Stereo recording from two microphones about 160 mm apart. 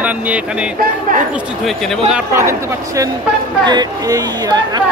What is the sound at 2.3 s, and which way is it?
Speech, 15° right (ahead or behind).